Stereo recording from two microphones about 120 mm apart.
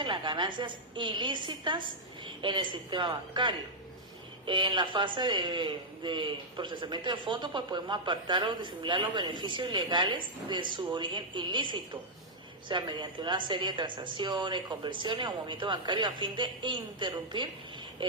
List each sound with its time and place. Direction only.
0.0 s a woman's voice: 40° right (ahead or behind)